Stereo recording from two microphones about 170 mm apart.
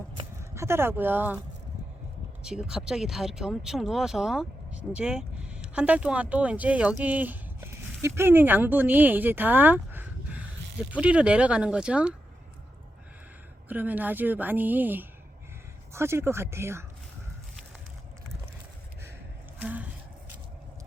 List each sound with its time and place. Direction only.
0.5 s a woman's voice: 15° right (ahead or behind)
2.4 s a woman's voice: 5° right (ahead or behind)
13.7 s a woman's voice: 10° right (ahead or behind)
19.5 s a sound: 10° right (ahead or behind)